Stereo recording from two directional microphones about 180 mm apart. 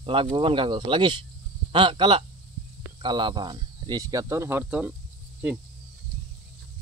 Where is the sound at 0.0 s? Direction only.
30° right (ahead or behind); by 4.9 s 10° right (ahead or behind).